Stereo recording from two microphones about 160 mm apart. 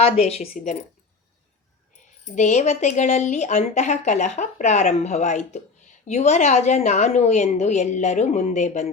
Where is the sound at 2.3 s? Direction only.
45° left (ahead or behind).